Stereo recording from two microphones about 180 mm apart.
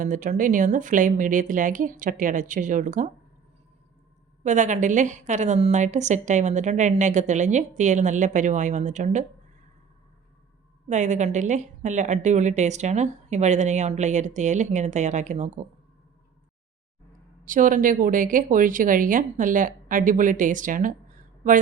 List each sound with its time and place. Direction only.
0.0 s speech: 45° right (ahead or behind)
4.4 s a woman's voice: 45° right (ahead or behind)
10.8 s a woman's voice: 40° right (ahead or behind)
17.4 s speech: 45° right (ahead or behind)